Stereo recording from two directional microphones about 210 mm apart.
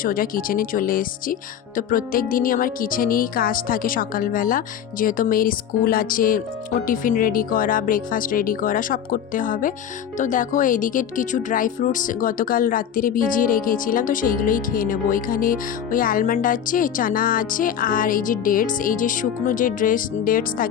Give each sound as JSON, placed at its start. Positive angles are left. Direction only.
{"t": 0.0, "sound": "speech", "side_deg": 40}